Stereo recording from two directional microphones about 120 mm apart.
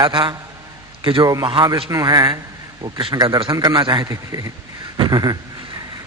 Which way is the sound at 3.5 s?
30° right (ahead or behind).